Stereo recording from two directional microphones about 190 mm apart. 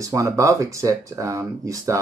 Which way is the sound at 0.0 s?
15° right (ahead or behind).